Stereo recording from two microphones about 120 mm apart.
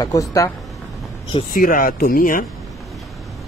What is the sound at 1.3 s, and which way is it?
Speech, 45° left (ahead or behind).